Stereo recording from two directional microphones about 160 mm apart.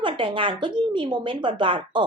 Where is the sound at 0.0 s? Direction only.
30° right (ahead or behind).